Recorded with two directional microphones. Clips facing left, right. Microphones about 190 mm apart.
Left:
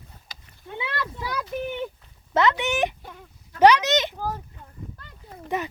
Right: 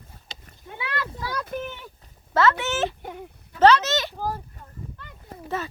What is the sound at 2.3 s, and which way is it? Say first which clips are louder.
Speech: even; 20° left (ahead or behind).